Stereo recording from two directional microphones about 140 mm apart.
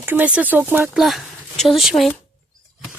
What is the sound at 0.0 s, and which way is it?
Speech, 15° right (ahead or behind).